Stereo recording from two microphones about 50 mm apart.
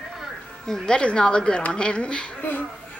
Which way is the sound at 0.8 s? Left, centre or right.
Centre.